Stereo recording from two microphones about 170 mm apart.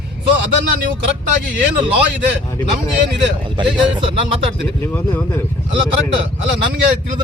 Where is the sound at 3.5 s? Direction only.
30° right (ahead or behind).